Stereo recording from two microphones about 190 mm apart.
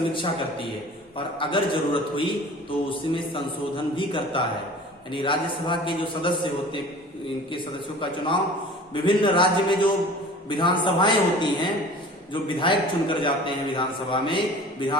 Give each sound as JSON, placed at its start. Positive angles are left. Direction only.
{"t": 0.1, "sound": "a man's voice", "side_deg": 25}
{"t": 8.0, "sound": "a man's voice", "side_deg": 25}